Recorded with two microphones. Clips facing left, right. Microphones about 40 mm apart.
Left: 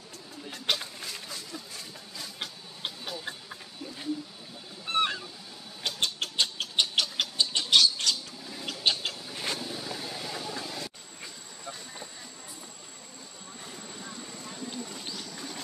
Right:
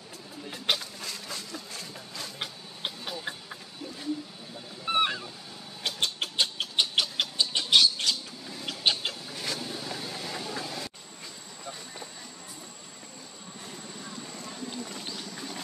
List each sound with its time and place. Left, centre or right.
1.3 s a sound: right
2.3 s tick-tock: centre
4.8 s goose: centre
5.9 s a sound: centre
8.6 s cat: centre
9.3 s vehicle: centre
9.6 s vehicle: centre
14.5 s clip-clop: centre